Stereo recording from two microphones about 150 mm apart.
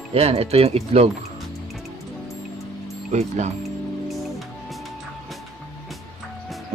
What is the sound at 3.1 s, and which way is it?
Speech, 50° right (ahead or behind).